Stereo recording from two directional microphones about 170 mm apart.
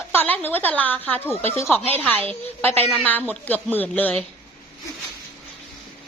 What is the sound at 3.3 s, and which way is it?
Speech, 10° left (ahead or behind).